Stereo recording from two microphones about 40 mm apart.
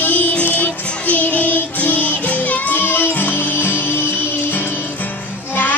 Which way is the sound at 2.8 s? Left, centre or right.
Left.